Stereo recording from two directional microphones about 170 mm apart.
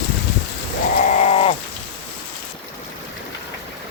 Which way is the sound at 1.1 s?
40° left (ahead or behind).